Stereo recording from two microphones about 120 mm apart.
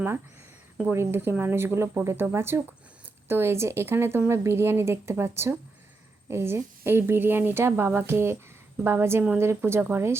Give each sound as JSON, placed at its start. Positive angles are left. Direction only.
{"t": 0.8, "sound": "speech", "side_deg": -15}